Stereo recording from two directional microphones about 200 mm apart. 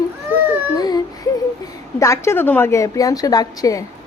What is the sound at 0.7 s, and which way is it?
Baby cry, 20° left (ahead or behind).